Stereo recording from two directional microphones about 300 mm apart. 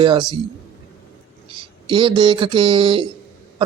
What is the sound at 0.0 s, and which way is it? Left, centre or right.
Mantra, centre.